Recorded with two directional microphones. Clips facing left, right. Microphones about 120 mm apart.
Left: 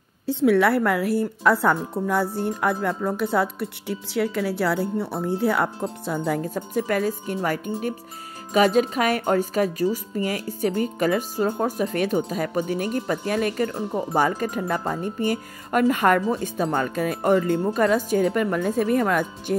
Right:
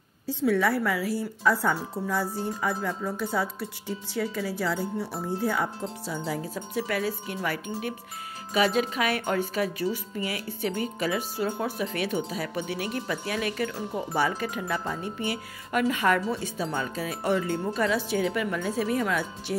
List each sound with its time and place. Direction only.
0.3 s speech: 70° left (ahead or behind); by 19.5 s 50° left (ahead or behind)